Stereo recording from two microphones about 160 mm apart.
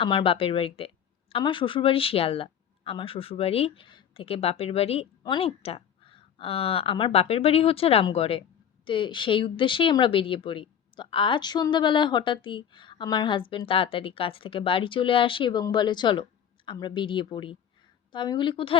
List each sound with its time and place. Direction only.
0.0 s a woman's voice: 30° left (ahead or behind)